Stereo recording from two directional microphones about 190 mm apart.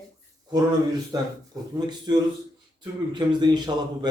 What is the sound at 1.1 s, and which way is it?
A man's voice, 20° right (ahead or behind).